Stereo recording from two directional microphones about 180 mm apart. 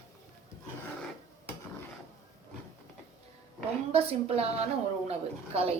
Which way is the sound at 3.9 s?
35° right (ahead or behind).